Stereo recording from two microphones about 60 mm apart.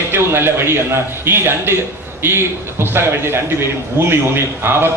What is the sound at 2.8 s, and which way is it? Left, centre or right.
A man's voice, right.